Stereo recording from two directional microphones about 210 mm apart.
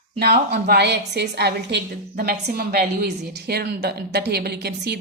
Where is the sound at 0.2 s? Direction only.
50° right (ahead or behind).